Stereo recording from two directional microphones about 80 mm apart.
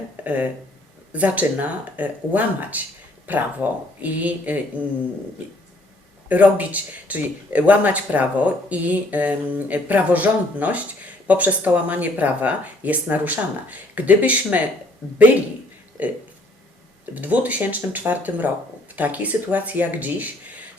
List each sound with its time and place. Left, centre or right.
0.2 s speech: centre
6.2 s speech: centre
16.0 s speech: right
17.2 s speech: right